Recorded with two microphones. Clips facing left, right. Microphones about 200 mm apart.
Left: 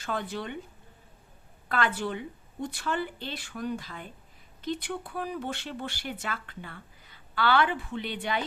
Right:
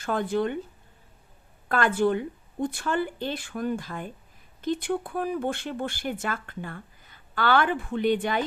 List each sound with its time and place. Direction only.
0.0 s speech: 50° right (ahead or behind)
1.7 s speech: 50° right (ahead or behind)